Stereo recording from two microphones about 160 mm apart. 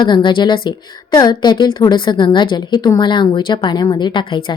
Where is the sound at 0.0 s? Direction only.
30° left (ahead or behind).